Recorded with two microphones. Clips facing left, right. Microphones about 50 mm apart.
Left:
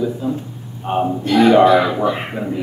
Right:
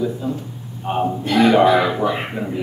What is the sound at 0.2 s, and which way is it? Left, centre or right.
Speech, centre.